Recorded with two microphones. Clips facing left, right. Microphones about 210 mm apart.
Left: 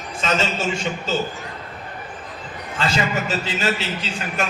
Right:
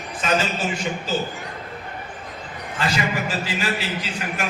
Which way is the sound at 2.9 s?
25° left (ahead or behind).